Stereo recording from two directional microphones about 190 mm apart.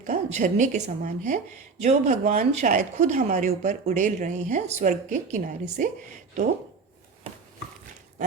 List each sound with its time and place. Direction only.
0.0 s speech: 40° right (ahead or behind)